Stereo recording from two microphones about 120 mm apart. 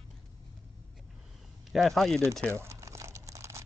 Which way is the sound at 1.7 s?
Centre (ahead or behind).